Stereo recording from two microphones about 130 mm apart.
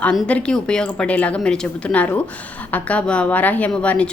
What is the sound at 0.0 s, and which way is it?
A woman's voice, 5° left (ahead or behind).